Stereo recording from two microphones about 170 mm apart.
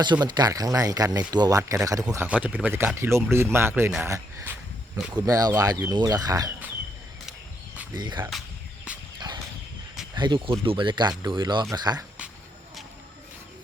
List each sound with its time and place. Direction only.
0.0 s speech: 25° right (ahead or behind)
2.2 s speech: 10° right (ahead or behind)
7.9 s speech: 25° right (ahead or behind)
9.1 s a sound: 25° right (ahead or behind)
10.2 s speech: 30° right (ahead or behind)